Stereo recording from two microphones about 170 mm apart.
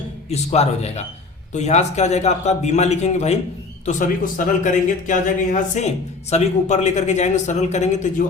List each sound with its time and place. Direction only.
0.3 s speech: 40° left (ahead or behind)